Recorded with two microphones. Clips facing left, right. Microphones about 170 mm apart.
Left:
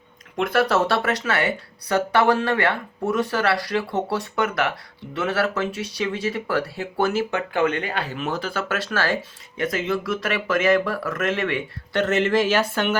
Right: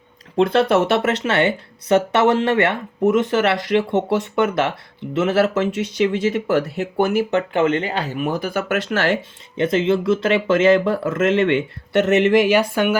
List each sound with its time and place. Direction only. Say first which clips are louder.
0.3 s speech: right 5 dB; 25° right (ahead or behind); by 13.0 s 10° right (ahead or behind)